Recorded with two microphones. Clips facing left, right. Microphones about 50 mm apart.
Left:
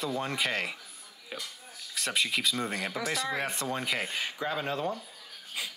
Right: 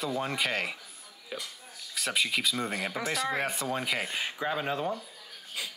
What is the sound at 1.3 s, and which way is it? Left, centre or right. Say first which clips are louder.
Speech: right 1 dB; centre.